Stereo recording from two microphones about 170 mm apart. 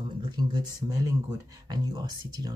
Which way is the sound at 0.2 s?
25° right (ahead or behind).